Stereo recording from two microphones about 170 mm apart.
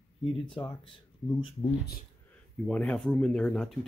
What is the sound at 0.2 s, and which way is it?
Speech, 30° left (ahead or behind).